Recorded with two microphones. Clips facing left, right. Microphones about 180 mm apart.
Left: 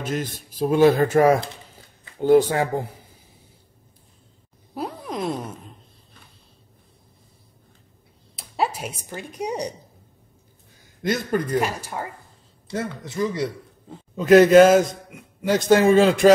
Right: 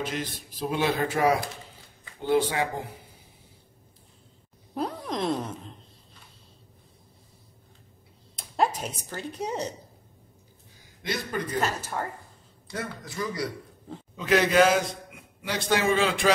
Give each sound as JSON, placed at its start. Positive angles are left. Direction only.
{"t": 0.0, "sound": "speech", "side_deg": 45}
{"t": 4.7, "sound": "a sound", "side_deg": 5}
{"t": 8.4, "sound": "speech", "side_deg": 5}
{"t": 11.0, "sound": "speech", "side_deg": 45}
{"t": 11.6, "sound": "speech", "side_deg": 10}
{"t": 12.6, "sound": "a man's voice", "side_deg": 25}
{"t": 14.1, "sound": "speech", "side_deg": 45}